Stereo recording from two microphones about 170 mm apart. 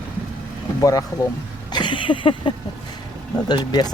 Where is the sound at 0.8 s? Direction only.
20° left (ahead or behind).